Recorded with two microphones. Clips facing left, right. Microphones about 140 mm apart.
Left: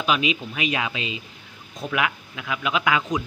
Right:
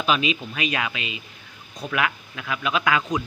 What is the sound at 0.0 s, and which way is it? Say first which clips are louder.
Speech: even; 15° left (ahead or behind).